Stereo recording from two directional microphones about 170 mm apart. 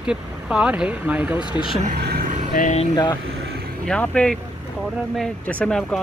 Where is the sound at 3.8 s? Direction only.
5° left (ahead or behind).